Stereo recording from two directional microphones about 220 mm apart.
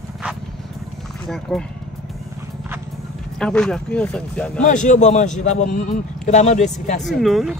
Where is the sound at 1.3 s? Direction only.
5° left (ahead or behind).